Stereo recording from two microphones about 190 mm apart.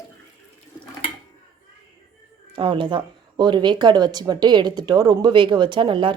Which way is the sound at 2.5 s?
25° right (ahead or behind).